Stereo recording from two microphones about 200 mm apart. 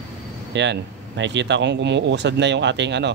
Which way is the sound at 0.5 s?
60° right (ahead or behind).